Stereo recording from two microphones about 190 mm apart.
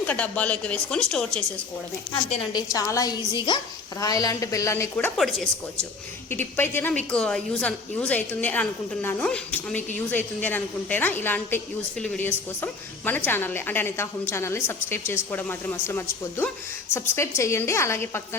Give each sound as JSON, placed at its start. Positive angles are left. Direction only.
{"t": 0.0, "sound": "speech", "side_deg": 5}
{"t": 2.3, "sound": "a woman's voice", "side_deg": 25}